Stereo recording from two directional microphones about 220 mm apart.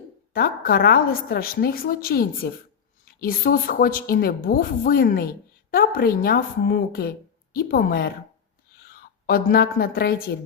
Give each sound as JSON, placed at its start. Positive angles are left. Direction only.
{"t": 0.3, "sound": "a woman's voice", "side_deg": 40}